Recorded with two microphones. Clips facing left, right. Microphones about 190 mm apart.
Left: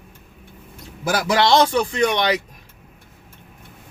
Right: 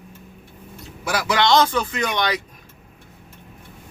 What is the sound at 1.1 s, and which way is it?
A man's voice, 35° left (ahead or behind).